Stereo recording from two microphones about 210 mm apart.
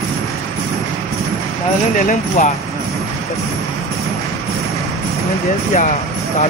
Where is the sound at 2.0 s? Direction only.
35° left (ahead or behind).